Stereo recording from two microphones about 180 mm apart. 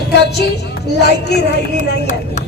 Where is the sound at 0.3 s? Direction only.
65° left (ahead or behind).